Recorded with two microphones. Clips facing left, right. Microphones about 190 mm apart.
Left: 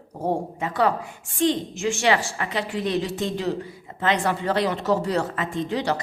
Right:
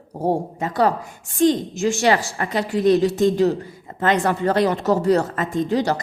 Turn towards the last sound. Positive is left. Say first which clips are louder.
# right 5 dB
turn(degrees=-40)  # may be behind; listen again after turning